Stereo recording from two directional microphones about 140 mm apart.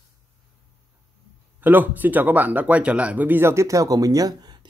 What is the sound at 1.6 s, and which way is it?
Speech, 15° right (ahead or behind).